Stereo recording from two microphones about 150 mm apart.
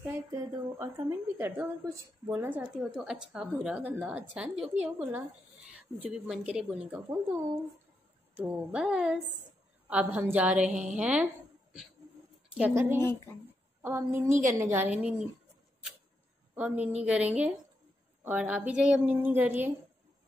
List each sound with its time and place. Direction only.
0.3 s a woman's voice: 20° right (ahead or behind)
8.4 s a woman's voice: 10° right (ahead or behind)
12.5 s a woman's voice: 15° right (ahead or behind)
16.5 s a woman's voice: 10° right (ahead or behind)